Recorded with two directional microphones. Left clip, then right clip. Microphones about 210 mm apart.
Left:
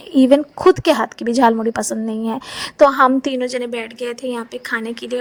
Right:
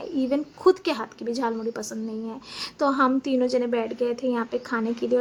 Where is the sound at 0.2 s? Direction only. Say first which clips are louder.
Left 13 dB; 35° left (ahead or behind).